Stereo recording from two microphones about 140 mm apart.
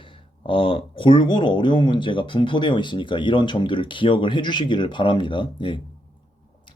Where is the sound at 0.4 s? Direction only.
40° left (ahead or behind).